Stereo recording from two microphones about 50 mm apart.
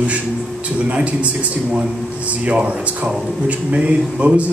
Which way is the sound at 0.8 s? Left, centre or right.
Right.